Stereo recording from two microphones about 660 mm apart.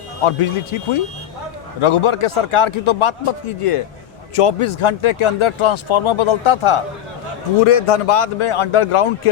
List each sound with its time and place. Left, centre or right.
0.3 s speech: left